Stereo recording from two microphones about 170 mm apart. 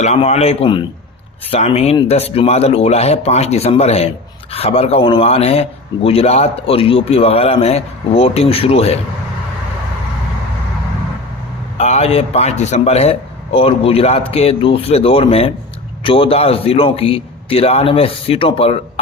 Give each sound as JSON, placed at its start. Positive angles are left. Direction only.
{"t": 0.0, "sound": "speech", "side_deg": 40}
{"t": 11.8, "sound": "speech", "side_deg": 40}